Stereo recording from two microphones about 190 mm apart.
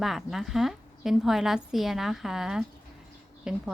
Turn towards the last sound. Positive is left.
turn(degrees=-5)  # may be behind; listen again after turning